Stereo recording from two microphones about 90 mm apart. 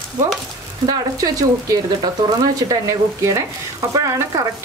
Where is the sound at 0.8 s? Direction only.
45° right (ahead or behind).